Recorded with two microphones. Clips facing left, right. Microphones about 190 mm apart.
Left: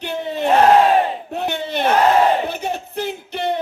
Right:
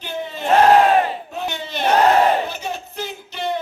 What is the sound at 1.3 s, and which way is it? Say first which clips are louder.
Battle cry: left 4 dB; 60° left (ahead or behind).